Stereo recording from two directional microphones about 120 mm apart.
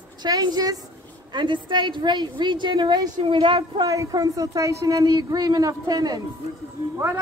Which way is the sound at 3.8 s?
30° right (ahead or behind).